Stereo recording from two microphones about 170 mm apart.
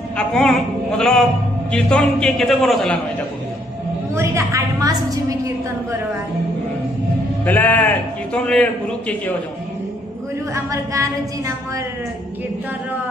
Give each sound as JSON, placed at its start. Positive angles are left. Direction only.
{"t": 0.2, "sound": "a man's voice", "side_deg": 5}
{"t": 4.1, "sound": "a woman's voice", "side_deg": -15}
{"t": 7.4, "sound": "a man's voice", "side_deg": 10}
{"t": 10.5, "sound": "a woman's voice", "side_deg": -20}